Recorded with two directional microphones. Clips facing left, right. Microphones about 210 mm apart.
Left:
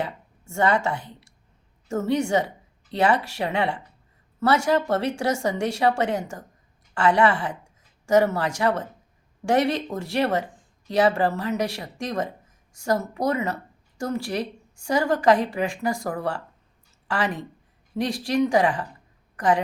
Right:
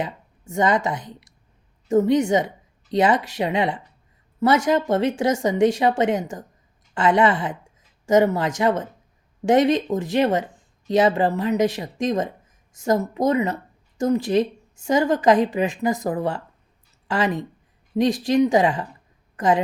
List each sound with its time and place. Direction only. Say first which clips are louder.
0.0 s a woman's voice: right 1 dB; 15° right (ahead or behind)